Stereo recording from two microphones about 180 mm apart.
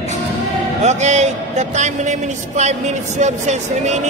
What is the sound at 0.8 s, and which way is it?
A man's voice, 40° right (ahead or behind).